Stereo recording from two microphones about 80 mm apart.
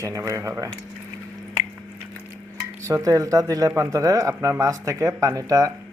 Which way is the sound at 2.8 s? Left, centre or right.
Right.